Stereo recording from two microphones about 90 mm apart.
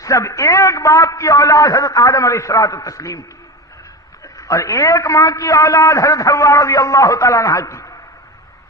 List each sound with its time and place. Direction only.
0.0 s a man's voice: 35° left (ahead or behind)